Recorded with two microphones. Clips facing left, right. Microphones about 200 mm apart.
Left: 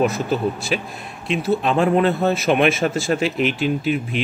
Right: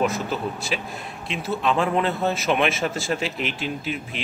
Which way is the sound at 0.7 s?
50° left (ahead or behind).